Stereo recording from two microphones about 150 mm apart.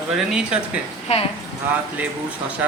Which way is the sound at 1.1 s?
45° left (ahead or behind).